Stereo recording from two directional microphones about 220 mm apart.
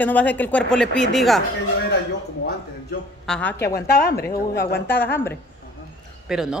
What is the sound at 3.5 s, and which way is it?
Speech, 45° left (ahead or behind).